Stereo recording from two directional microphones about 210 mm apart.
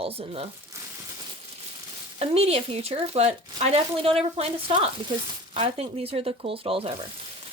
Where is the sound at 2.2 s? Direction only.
30° right (ahead or behind).